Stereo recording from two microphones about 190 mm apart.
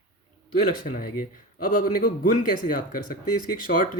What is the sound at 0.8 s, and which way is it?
Speech, 45° left (ahead or behind).